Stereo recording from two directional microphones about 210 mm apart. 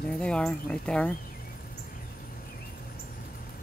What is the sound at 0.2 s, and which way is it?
Speech, 5° left (ahead or behind).